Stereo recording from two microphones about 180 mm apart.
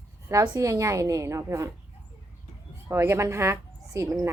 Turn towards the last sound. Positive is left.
turn(degrees=-15)  # may be behind; listen again after turning